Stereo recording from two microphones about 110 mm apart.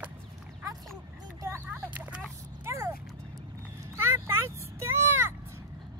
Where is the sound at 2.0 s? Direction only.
10° right (ahead or behind).